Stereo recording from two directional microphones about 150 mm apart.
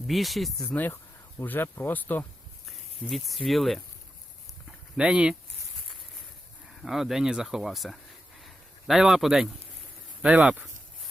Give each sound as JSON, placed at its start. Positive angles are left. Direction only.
{"t": 0.1, "sound": "speech", "side_deg": 0}
{"t": 0.7, "sound": "speech", "side_deg": 10}
{"t": 3.1, "sound": "speech", "side_deg": 0}
{"t": 4.9, "sound": "speech", "side_deg": -5}
{"t": 6.7, "sound": "speech", "side_deg": 0}
{"t": 8.4, "sound": "a sound", "side_deg": 0}
{"t": 10.2, "sound": "speech", "side_deg": -10}